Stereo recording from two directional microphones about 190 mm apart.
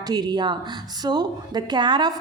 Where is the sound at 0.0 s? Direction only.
20° right (ahead or behind).